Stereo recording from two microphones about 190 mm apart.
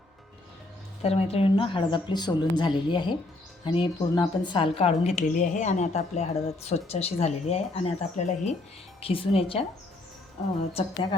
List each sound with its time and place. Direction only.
1.0 s a woman's voice: 30° left (ahead or behind)